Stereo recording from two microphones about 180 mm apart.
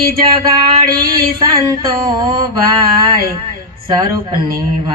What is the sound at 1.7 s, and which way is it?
Mantra, 25° right (ahead or behind).